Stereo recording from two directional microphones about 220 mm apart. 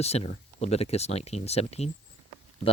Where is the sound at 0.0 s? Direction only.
30° left (ahead or behind).